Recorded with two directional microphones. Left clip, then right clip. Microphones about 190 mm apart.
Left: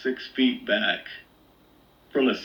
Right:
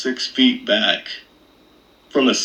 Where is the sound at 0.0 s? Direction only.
60° right (ahead or behind).